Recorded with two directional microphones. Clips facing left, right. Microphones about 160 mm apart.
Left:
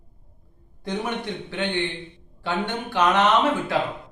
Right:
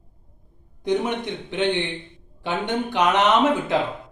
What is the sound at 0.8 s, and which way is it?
Speech, 20° right (ahead or behind).